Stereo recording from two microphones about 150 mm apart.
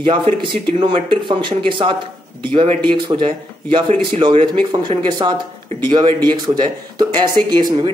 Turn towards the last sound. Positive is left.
turn(degrees=-30)  # may be behind; listen again after turning